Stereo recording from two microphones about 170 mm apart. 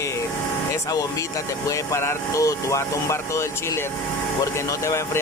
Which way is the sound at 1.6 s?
15° left (ahead or behind).